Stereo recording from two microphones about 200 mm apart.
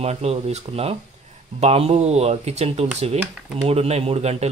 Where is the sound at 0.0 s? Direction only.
30° right (ahead or behind).